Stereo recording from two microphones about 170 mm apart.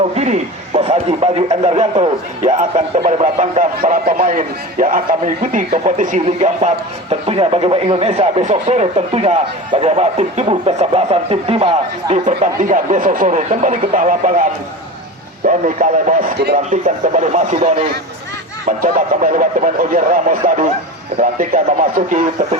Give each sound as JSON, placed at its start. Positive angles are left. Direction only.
{"t": 0.2, "sound": "speech", "side_deg": -40}
{"t": 3.8, "sound": "speech", "side_deg": -55}
{"t": 15.4, "sound": "speech", "side_deg": -50}
{"t": 18.8, "sound": "speech", "side_deg": -55}